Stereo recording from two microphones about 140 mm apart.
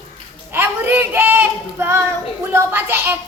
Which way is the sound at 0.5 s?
15° right (ahead or behind).